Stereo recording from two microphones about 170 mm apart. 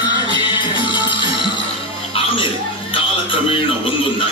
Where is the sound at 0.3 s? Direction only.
30° left (ahead or behind).